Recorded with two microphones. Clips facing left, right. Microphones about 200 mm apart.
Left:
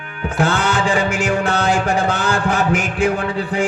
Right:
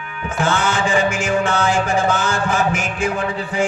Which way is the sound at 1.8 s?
60° left (ahead or behind).